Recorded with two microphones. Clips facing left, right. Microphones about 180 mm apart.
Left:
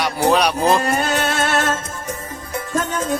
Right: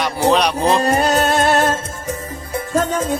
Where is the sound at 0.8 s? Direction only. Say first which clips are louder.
Right 4 dB; 35° right (ahead or behind).